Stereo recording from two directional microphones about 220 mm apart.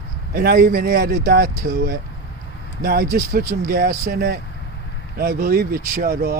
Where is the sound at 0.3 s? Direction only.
45° right (ahead or behind).